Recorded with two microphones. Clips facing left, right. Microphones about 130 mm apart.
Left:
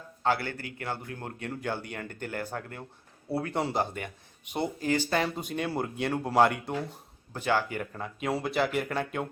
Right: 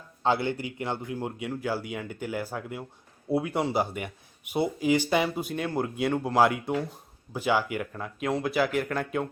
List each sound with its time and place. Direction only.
0.2 s a man's voice: 20° right (ahead or behind); by 9.3 s centre (ahead or behind)